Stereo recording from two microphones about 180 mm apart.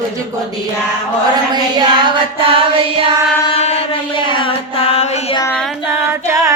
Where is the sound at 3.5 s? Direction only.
35° left (ahead or behind).